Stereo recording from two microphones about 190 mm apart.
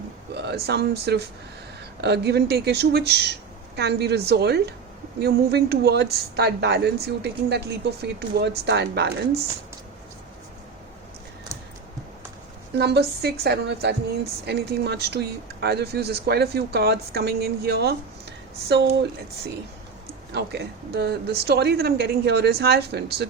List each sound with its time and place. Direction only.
0.3 s speech: 60° right (ahead or behind)
12.7 s speech: 60° right (ahead or behind)
20.3 s speech: 60° right (ahead or behind)